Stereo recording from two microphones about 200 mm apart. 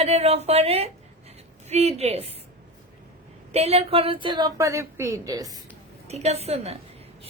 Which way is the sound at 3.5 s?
30° right (ahead or behind).